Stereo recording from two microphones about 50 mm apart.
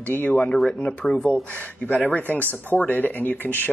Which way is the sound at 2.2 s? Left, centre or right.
Left.